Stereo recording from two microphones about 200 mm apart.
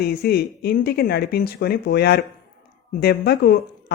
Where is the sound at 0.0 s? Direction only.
50° left (ahead or behind).